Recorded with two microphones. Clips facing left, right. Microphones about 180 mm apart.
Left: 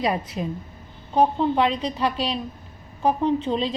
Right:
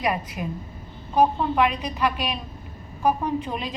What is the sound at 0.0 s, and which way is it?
A woman's voice, 30° left (ahead or behind).